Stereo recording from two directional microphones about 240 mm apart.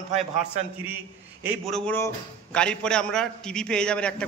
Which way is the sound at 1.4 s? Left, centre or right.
Centre.